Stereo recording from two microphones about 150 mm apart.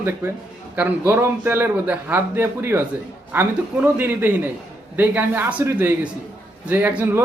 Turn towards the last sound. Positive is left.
turn(degrees=-10)  # may be behind; listen again after turning